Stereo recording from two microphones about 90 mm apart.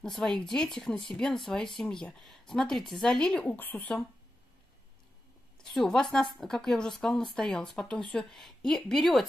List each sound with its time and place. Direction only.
0.0 s speech: 5° left (ahead or behind)
5.6 s speech: 5° left (ahead or behind)